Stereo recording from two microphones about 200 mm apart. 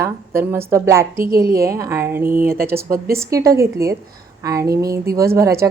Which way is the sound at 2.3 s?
45° right (ahead or behind).